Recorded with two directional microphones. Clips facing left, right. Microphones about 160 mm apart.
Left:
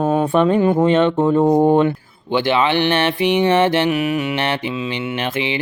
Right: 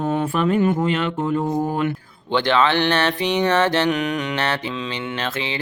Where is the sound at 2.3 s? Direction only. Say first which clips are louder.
Left 2 dB; 10° left (ahead or behind).